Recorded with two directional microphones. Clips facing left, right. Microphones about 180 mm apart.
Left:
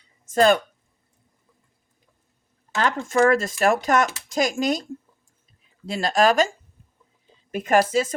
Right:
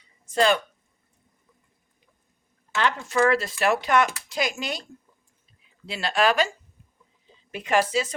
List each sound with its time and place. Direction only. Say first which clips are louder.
0.3 s speech: left 4 dB; 45° left (ahead or behind)
2.7 s speech: left 3 dB; 45° left (ahead or behind)
7.5 s speech: left 4 dB; 45° left (ahead or behind)